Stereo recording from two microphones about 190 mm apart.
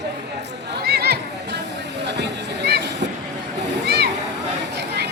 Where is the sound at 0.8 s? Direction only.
55° right (ahead or behind).